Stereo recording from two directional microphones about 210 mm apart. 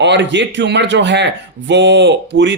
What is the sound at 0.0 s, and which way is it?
A man's voice, 55° right (ahead or behind).